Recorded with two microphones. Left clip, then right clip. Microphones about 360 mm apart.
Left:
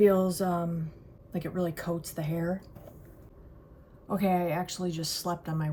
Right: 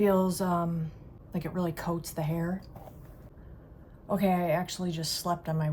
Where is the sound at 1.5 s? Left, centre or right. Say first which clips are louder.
Left 1 dB; right.